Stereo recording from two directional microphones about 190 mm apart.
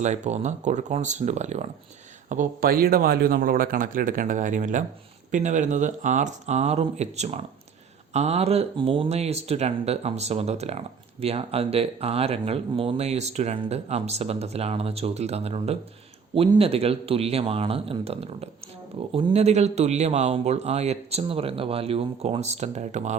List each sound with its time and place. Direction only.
0.0 s speech: 35° right (ahead or behind)